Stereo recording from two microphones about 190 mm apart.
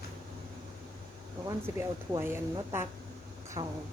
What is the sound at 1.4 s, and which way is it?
A woman's voice, 15° right (ahead or behind).